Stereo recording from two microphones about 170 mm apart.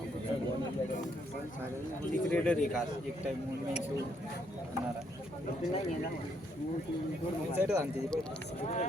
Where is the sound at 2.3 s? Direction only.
5° left (ahead or behind).